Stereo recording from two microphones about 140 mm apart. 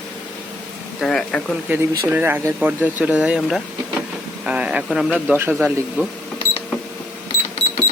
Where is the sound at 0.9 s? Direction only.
5° left (ahead or behind).